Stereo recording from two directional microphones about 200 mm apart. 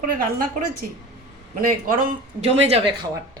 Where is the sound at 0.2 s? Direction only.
45° right (ahead or behind).